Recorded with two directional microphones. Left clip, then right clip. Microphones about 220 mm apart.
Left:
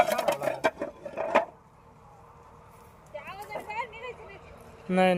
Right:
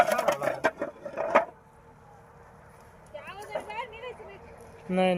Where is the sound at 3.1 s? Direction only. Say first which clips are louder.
Right 1 dB; 45° right (ahead or behind).